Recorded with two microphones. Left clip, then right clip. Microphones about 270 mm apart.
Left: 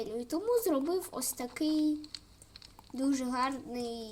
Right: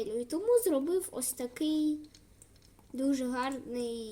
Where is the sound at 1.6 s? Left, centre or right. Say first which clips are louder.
Left 1 dB; left.